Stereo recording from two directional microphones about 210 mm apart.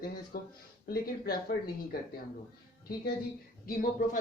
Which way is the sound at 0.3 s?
45° left (ahead or behind).